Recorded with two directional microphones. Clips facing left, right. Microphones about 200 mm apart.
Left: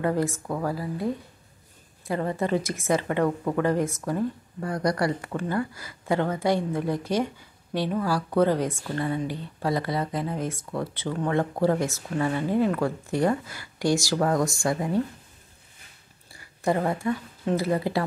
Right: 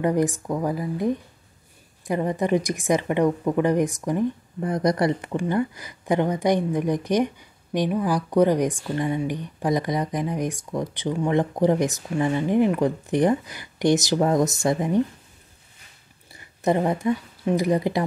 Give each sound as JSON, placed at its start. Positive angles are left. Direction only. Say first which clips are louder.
{"t": 0.0, "sound": "speech", "louder": "right 4 dB", "side_deg": -15}
{"t": 16.3, "sound": "speech", "louder": "right 3 dB", "side_deg": -20}